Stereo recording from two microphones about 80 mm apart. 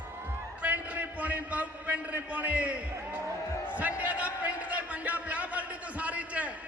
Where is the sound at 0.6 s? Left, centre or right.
Centre.